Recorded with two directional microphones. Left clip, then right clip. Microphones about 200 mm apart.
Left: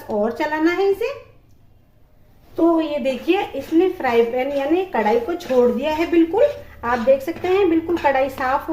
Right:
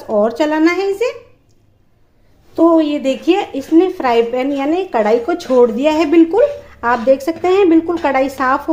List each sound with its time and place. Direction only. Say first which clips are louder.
0.1 s a woman's voice: right 7 dB; 40° right (ahead or behind)
2.7 s a woman's voice: right 6 dB; 45° right (ahead or behind)